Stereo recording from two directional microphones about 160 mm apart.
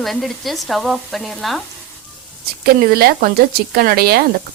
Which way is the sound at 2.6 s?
70° right (ahead or behind).